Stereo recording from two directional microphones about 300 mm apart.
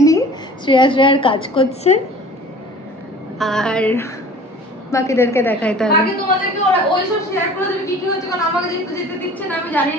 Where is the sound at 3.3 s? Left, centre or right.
Centre.